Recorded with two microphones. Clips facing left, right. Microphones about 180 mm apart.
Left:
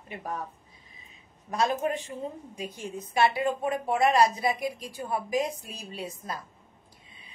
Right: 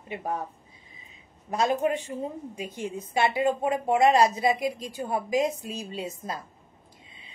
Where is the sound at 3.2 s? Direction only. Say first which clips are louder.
Right 4 dB; 20° right (ahead or behind).